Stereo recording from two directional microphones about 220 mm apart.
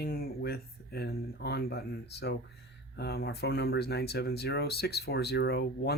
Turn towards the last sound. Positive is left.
turn(degrees=45)  # may be behind; listen again after turning